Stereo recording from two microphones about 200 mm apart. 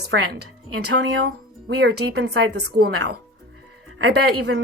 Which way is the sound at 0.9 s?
55° right (ahead or behind).